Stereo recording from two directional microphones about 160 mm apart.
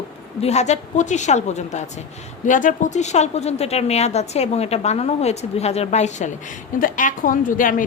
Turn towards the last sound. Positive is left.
turn(degrees=55)  # may be behind; listen again after turning